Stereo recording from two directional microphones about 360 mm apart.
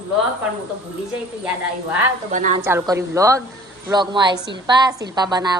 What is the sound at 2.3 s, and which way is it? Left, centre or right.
Speech, centre.